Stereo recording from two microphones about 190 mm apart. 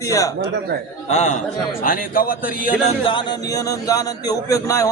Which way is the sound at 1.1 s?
35° left (ahead or behind).